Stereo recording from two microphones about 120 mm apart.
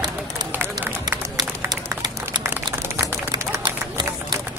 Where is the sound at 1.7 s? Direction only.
35° right (ahead or behind).